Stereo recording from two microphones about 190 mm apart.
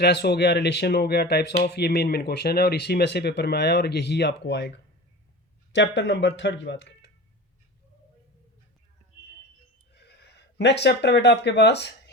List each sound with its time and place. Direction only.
0.0 s speech: 60° left (ahead or behind)
5.7 s speech: 70° left (ahead or behind)
9.9 s speech: 65° left (ahead or behind)